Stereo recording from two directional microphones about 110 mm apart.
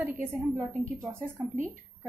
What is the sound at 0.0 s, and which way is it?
A woman's voice, 20° right (ahead or behind).